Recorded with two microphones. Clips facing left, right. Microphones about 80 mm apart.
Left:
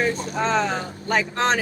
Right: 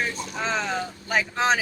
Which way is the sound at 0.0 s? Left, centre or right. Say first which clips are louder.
Left 6 dB; centre.